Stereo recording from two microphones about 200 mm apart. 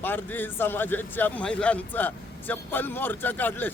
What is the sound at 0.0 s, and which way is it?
Speech, 10° left (ahead or behind).